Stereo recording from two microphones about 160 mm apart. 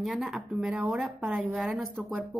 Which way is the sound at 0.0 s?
Centre (ahead or behind).